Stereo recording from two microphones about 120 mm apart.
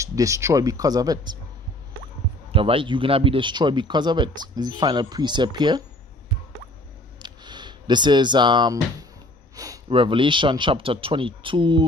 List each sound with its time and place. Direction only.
0.0 s speech: 25° right (ahead or behind)
2.5 s speech: 50° right (ahead or behind)
7.2 s a sound: 40° right (ahead or behind)
9.8 s speech: 45° right (ahead or behind)